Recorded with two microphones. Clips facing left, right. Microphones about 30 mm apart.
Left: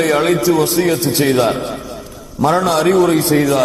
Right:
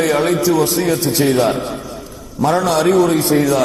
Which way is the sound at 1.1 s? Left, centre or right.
Left.